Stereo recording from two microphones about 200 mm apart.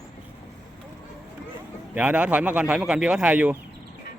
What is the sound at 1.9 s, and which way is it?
Speech, 5° right (ahead or behind).